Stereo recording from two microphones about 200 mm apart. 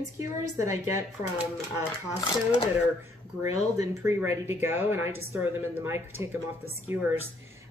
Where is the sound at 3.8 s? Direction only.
15° right (ahead or behind).